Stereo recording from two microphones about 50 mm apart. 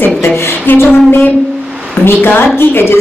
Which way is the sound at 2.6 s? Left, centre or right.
Left.